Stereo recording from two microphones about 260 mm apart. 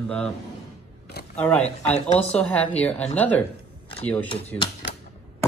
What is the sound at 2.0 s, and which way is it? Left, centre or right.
Speech, left.